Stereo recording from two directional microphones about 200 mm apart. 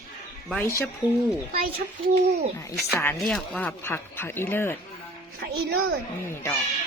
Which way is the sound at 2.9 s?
10° left (ahead or behind).